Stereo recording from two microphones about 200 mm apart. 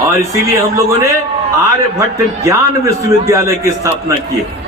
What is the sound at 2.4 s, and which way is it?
A man's voice, 15° right (ahead or behind).